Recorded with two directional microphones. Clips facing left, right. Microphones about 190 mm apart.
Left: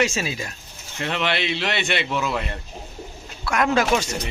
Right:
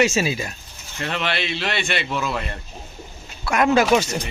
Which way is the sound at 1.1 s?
20° left (ahead or behind).